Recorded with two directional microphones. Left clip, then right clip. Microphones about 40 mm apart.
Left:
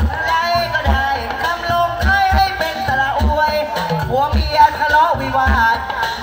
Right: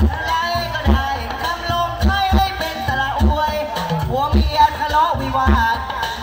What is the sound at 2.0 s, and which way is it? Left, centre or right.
Music, left.